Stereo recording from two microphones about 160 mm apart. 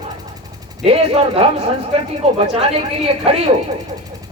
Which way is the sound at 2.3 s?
25° right (ahead or behind).